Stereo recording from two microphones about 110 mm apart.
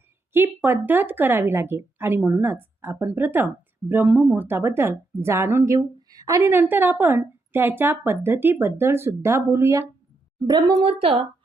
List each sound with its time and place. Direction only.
0.3 s a woman's voice: 20° right (ahead or behind)
10.4 s a woman's voice: 40° right (ahead or behind)
11.0 s speech: 60° right (ahead or behind)